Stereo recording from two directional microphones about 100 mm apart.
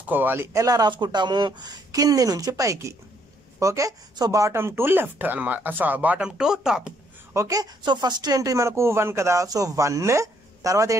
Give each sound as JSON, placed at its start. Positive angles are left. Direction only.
{"t": 0.1, "sound": "speech", "side_deg": -20}
{"t": 7.3, "sound": "speech", "side_deg": -35}